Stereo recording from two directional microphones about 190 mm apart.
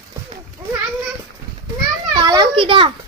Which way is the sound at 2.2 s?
25° right (ahead or behind).